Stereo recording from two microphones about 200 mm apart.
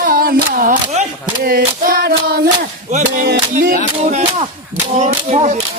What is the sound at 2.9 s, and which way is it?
Music, 40° right (ahead or behind).